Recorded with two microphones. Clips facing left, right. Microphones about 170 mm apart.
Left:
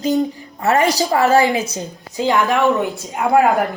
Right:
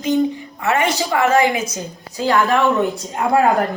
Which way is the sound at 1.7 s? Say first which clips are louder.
Left 2 dB; 20° left (ahead or behind).